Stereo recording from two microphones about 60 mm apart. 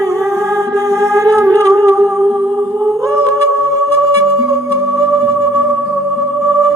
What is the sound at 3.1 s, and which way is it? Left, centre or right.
Music, right.